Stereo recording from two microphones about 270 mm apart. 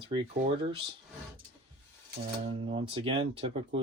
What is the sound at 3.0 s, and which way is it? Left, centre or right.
Speech, centre.